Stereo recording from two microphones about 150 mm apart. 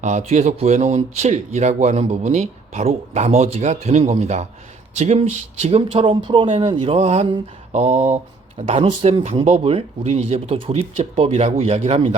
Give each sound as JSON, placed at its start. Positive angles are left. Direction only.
{"t": 0.0, "sound": "speech", "side_deg": -50}